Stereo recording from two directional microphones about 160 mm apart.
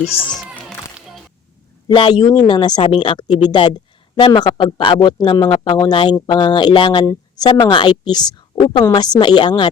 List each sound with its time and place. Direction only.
1.9 s speech: 30° left (ahead or behind)